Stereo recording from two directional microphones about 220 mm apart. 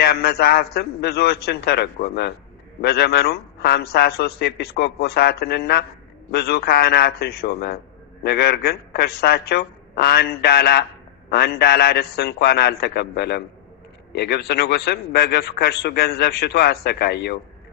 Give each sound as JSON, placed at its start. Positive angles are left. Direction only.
{"t": 0.0, "sound": "a man's voice", "side_deg": 45}